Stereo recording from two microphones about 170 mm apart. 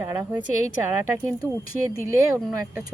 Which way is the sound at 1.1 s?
15° right (ahead or behind).